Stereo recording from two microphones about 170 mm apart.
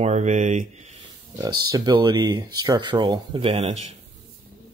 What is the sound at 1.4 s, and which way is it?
Speech, 25° right (ahead or behind).